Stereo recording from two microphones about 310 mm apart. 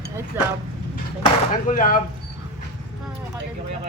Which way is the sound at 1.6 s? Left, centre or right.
Left.